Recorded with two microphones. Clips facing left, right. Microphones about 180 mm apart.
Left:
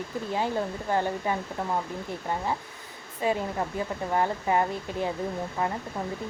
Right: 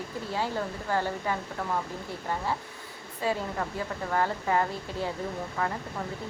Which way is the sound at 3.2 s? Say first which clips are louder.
Left 3 dB; 20° left (ahead or behind).